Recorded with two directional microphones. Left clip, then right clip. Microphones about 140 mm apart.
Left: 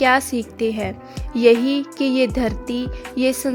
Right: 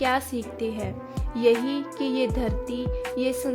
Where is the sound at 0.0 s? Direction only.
50° left (ahead or behind).